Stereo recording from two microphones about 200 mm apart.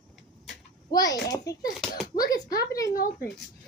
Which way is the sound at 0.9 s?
20° left (ahead or behind).